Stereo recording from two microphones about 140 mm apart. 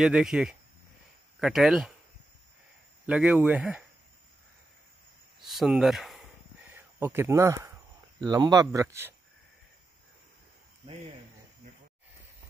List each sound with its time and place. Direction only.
0.0 s speech: 5° right (ahead or behind)
3.1 s speech: 5° right (ahead or behind)
5.4 s a sound: centre (ahead or behind)
6.7 s speech: 15° right (ahead or behind)